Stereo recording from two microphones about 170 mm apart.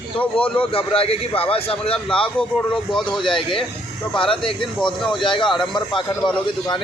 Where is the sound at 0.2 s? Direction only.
10° left (ahead or behind).